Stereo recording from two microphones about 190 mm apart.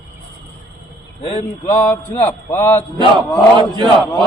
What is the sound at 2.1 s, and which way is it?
Speech, 10° left (ahead or behind).